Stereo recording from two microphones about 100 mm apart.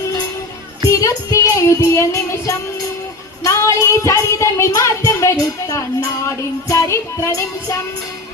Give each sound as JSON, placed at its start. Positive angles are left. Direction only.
{"t": 0.9, "sound": "music", "side_deg": 35}